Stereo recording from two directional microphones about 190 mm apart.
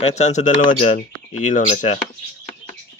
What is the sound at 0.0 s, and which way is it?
Speech, 35° left (ahead or behind).